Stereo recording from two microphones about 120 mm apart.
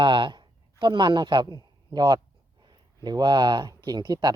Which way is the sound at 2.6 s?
35° right (ahead or behind).